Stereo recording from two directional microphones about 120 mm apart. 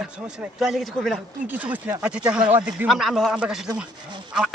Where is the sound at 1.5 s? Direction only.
15° right (ahead or behind).